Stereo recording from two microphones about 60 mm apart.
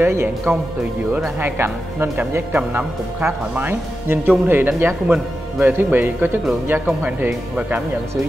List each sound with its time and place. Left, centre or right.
0.0 s speech: right
1.4 s speech: right
5.0 s speech: right
5.7 s speech: right